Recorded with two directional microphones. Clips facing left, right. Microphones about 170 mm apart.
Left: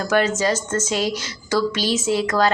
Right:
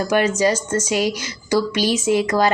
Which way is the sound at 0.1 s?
10° right (ahead or behind).